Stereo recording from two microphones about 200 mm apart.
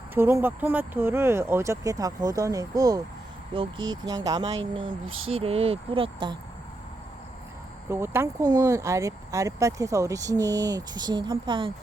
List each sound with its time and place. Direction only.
0.1 s speech: 10° right (ahead or behind)
5.0 s a sound: 90° right
5.3 s speech: 30° right (ahead or behind)
7.9 s speech: 10° right (ahead or behind)